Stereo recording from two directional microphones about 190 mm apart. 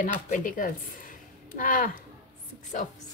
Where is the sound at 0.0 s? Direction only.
45° left (ahead or behind).